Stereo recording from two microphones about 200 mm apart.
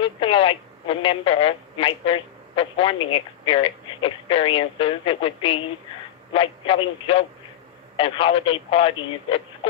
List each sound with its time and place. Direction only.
0.0 s speech: 25° left (ahead or behind)